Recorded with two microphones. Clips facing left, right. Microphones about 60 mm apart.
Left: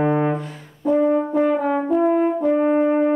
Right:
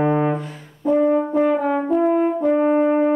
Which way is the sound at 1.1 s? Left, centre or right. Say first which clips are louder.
Right 1 dB; centre.